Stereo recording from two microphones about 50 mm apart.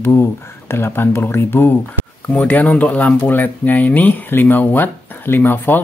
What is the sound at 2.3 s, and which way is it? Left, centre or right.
Speech, left.